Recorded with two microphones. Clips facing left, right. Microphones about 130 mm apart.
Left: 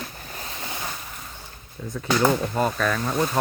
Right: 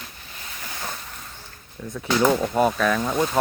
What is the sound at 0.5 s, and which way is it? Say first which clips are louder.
Boat: left 2 dB; 20° left (ahead or behind).